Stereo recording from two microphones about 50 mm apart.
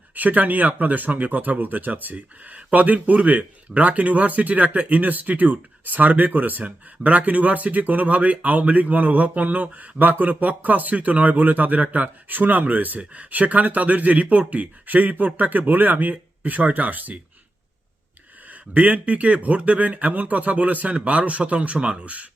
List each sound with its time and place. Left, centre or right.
0.1 s speech: right
18.4 s speech: right